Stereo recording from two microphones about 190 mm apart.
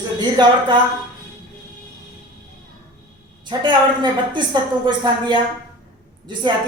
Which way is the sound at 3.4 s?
25° right (ahead or behind).